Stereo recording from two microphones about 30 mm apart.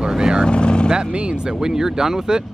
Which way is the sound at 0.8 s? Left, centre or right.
Right.